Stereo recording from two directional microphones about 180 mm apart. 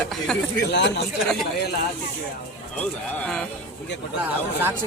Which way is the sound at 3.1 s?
5° left (ahead or behind).